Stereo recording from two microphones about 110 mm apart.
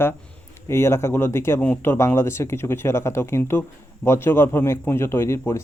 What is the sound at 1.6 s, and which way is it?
Speech, 10° left (ahead or behind).